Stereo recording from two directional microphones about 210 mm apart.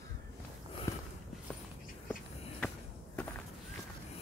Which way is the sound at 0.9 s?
15° left (ahead or behind).